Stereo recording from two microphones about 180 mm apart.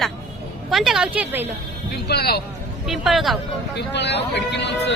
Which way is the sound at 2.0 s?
60° left (ahead or behind).